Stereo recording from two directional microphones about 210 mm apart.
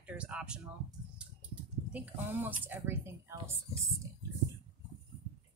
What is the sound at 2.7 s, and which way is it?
Speech, 10° right (ahead or behind).